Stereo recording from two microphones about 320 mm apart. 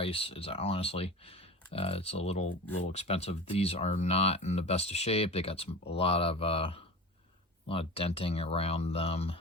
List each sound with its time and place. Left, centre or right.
0.0 s speech: centre